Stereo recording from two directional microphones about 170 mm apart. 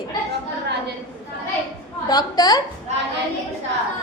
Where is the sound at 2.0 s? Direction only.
25° left (ahead or behind).